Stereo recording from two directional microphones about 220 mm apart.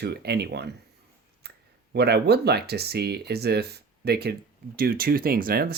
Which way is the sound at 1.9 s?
50° right (ahead or behind).